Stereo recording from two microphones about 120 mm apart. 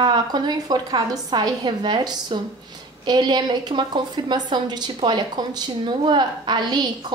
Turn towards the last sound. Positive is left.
turn(degrees=-40)  # may be behind; listen again after turning